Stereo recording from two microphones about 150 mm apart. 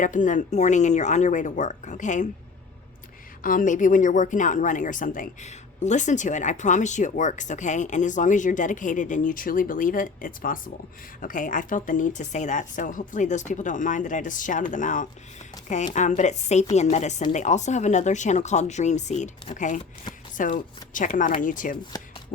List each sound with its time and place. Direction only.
0.0 s speech: 55° left (ahead or behind)
3.4 s speech: 65° left (ahead or behind)